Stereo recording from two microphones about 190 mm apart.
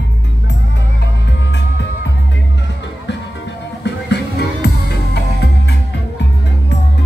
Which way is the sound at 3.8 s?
60° left (ahead or behind).